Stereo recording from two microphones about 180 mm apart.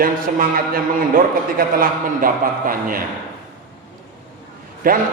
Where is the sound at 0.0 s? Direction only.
50° right (ahead or behind).